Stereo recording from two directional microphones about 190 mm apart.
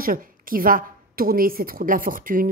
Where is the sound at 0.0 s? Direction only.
50° right (ahead or behind).